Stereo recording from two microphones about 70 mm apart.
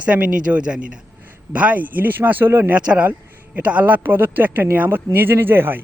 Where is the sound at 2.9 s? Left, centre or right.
Centre.